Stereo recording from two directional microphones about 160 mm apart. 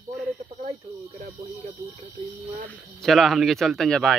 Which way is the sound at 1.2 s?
45° right (ahead or behind).